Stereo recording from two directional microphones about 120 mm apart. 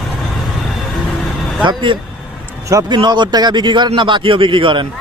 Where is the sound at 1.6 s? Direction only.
40° right (ahead or behind).